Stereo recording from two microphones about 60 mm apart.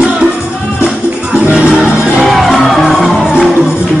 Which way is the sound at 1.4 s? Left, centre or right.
Right.